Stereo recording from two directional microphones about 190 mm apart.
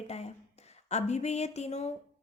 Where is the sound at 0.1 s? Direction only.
35° left (ahead or behind).